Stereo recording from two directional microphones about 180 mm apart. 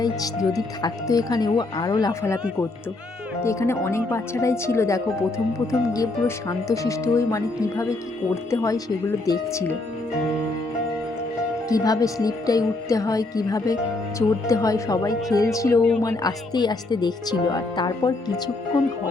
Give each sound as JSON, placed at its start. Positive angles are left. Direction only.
{"t": 0.0, "sound": "speech", "side_deg": 20}
{"t": 3.4, "sound": "speech", "side_deg": 15}
{"t": 11.7, "sound": "speech", "side_deg": 20}